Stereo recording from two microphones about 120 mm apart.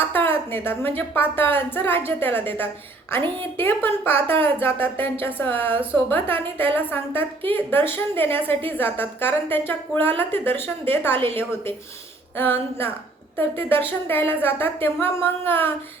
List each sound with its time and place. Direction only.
0.0 s a woman's voice: 15° left (ahead or behind)
12.4 s a woman's voice: 15° left (ahead or behind)